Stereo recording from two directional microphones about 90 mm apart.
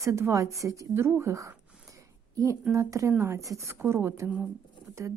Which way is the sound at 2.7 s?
35° right (ahead or behind).